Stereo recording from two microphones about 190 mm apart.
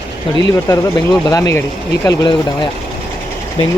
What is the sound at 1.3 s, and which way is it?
Speech, 15° left (ahead or behind).